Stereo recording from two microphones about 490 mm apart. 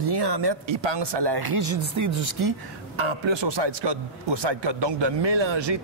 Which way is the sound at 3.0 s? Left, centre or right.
Right.